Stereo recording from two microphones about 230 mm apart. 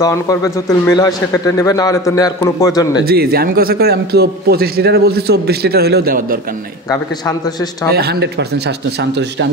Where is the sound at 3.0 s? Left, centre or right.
Right.